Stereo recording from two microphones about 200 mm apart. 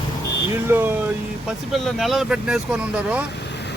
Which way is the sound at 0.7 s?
10° right (ahead or behind).